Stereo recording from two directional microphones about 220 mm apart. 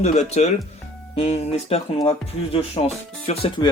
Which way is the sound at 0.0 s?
30° left (ahead or behind).